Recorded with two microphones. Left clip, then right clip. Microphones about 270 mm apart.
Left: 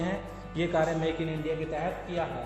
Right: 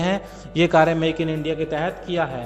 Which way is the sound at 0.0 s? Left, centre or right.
Right.